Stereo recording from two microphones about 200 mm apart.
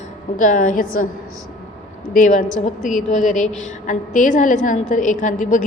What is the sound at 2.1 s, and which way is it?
A woman's voice, 40° left (ahead or behind).